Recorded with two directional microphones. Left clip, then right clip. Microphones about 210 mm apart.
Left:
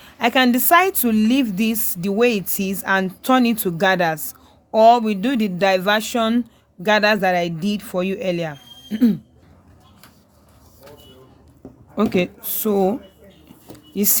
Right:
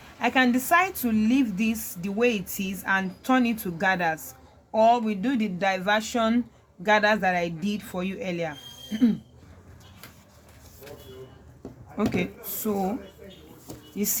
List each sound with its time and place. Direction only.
0.2 s a woman's voice: 50° left (ahead or behind)
11.9 s a woman's voice: 50° left (ahead or behind)
13.9 s speech: 50° left (ahead or behind)